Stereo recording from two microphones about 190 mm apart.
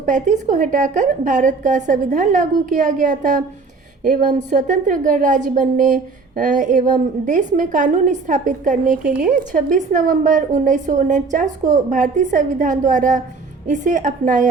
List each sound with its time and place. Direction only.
0.0 s a woman's voice: 40° right (ahead or behind)